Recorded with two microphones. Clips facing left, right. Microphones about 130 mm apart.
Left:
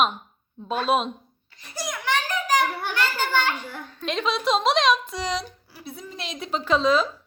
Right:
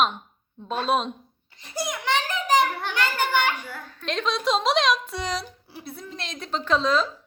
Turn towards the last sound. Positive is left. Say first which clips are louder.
# left 2 dB
turn(degrees=5)  # may be behind; listen again after turning